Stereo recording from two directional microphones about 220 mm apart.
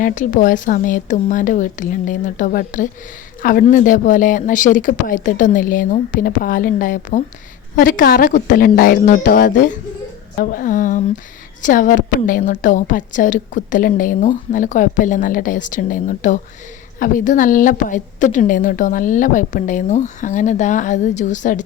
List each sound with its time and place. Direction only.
0.0 s a woman's voice: 35° left (ahead or behind)